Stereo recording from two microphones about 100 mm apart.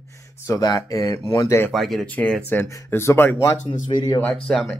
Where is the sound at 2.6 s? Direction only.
25° left (ahead or behind).